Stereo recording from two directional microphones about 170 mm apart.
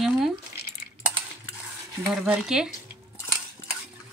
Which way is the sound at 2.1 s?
5° right (ahead or behind).